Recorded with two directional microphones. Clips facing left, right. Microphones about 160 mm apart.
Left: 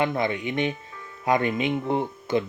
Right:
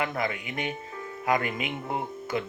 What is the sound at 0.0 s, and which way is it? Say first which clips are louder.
Speech: left 5 dB; 25° left (ahead or behind).